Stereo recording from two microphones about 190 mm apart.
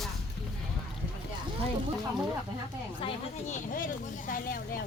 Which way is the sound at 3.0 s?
40° left (ahead or behind).